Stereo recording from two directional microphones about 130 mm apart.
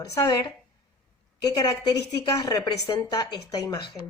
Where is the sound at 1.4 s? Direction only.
30° left (ahead or behind).